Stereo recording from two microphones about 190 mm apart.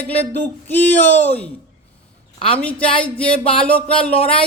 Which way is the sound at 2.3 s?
30° left (ahead or behind).